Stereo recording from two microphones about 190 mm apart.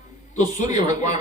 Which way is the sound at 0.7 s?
40° left (ahead or behind).